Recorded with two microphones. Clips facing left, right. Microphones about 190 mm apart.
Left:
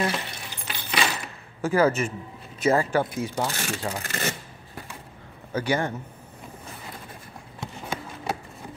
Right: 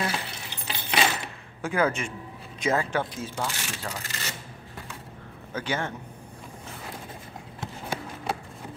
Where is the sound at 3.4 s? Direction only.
45° left (ahead or behind).